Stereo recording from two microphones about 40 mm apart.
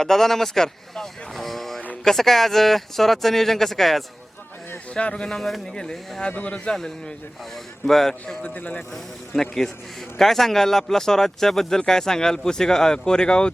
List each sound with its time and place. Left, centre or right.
0.0 s speech: centre
4.9 s speech: left
5.4 s speech: centre
5.7 s speech: centre
6.3 s speech: left
6.7 s speech: centre
8.5 s speech: left
8.9 s speech: centre